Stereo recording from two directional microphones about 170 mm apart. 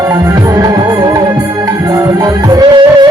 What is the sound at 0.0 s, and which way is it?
Music, 20° right (ahead or behind).